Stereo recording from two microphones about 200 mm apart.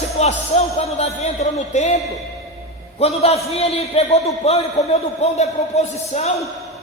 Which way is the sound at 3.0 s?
30° left (ahead or behind).